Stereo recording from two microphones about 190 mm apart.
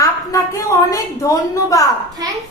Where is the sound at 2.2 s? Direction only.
20° right (ahead or behind).